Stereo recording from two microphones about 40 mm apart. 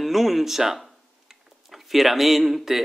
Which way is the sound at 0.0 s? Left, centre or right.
Centre.